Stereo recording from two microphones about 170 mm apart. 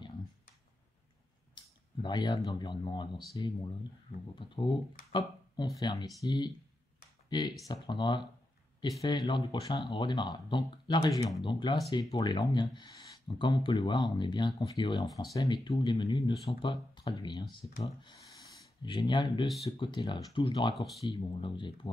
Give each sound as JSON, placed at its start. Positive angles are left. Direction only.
{"t": 1.5, "sound": "speech", "side_deg": 25}
{"t": 20.7, "sound": "speech", "side_deg": 0}
{"t": 21.0, "sound": "speech", "side_deg": 30}